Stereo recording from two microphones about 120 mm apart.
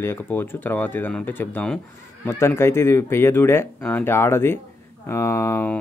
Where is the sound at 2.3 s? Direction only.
20° left (ahead or behind).